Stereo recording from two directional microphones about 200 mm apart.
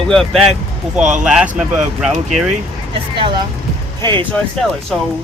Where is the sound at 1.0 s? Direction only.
35° right (ahead or behind).